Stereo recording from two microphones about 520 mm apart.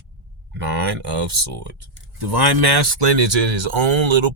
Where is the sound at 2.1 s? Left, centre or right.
Right.